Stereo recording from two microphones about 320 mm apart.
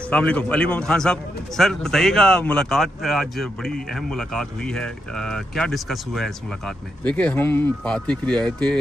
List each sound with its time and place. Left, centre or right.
0.1 s a man's voice: centre